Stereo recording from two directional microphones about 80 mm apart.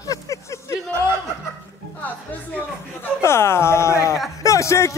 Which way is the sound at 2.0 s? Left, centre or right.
Left.